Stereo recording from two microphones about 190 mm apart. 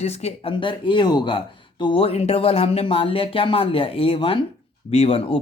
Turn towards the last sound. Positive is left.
turn(degrees=30)  # may be behind; listen again after turning